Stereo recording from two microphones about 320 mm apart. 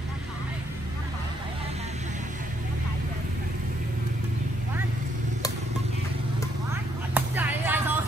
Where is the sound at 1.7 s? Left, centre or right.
Right.